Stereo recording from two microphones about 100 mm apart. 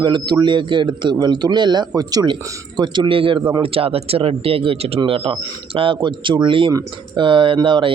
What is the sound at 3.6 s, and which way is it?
Speech, 70° right (ahead or behind).